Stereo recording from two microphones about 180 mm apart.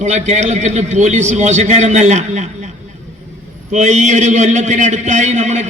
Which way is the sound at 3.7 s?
40° right (ahead or behind).